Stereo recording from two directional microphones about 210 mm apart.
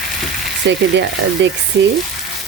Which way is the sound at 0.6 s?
55° right (ahead or behind).